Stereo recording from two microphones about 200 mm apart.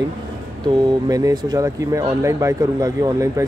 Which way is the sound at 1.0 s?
15° right (ahead or behind).